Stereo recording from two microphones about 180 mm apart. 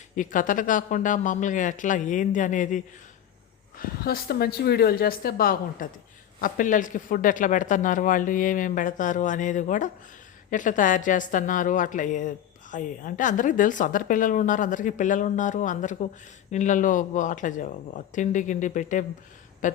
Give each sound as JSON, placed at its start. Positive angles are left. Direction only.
{"t": 0.2, "sound": "a woman's voice", "side_deg": 45}